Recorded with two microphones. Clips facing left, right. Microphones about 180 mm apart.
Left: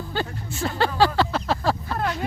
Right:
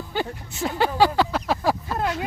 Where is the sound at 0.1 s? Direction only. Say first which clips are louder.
Right 2 dB; 15° right (ahead or behind).